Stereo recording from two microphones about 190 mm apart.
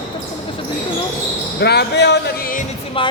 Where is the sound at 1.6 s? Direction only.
60° left (ahead or behind).